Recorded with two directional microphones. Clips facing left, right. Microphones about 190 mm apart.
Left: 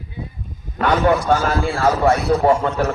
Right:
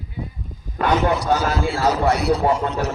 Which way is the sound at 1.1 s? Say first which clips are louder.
Left 2 dB; 50° left (ahead or behind).